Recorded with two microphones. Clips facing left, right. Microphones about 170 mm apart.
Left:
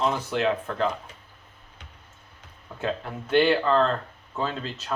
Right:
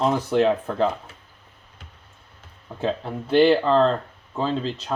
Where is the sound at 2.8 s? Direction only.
30° right (ahead or behind).